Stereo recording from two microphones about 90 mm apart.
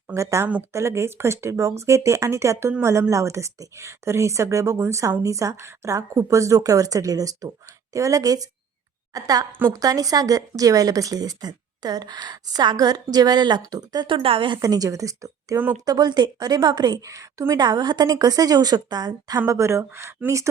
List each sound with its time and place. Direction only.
0.1 s speech: 35° right (ahead or behind)
14.1 s a woman's voice: 85° right
14.6 s speech: 45° right (ahead or behind)
15.5 s speech: 20° right (ahead or behind)
15.9 s speech: 50° right (ahead or behind)
17.0 s speech: 40° right (ahead or behind)
19.5 s speech: 35° right (ahead or behind)